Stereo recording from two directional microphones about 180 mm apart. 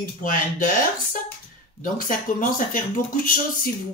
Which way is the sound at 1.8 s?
50° left (ahead or behind).